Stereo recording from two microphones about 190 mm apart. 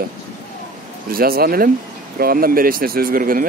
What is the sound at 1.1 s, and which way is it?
Speech, 50° right (ahead or behind).